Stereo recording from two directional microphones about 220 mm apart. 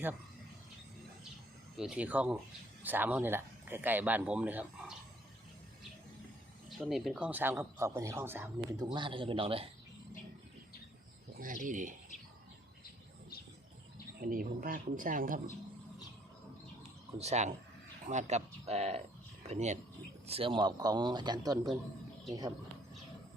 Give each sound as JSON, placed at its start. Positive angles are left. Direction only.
{"t": 1.7, "sound": "speech", "side_deg": -5}
{"t": 6.7, "sound": "speech", "side_deg": 0}
{"t": 11.3, "sound": "speech", "side_deg": -35}
{"t": 14.2, "sound": "speech", "side_deg": -40}
{"t": 17.2, "sound": "speech", "side_deg": -30}